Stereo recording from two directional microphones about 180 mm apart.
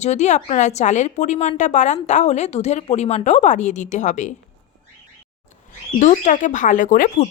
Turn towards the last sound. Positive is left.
turn(degrees=50)  # may be behind; listen again after turning